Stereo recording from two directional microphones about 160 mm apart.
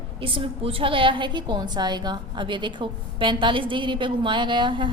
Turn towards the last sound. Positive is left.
turn(degrees=-30)  # may be behind; listen again after turning